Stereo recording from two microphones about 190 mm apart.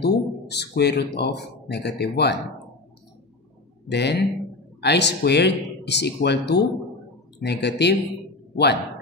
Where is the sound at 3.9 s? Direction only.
60° left (ahead or behind).